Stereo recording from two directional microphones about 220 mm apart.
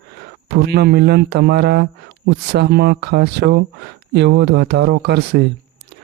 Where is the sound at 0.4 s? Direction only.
50° right (ahead or behind).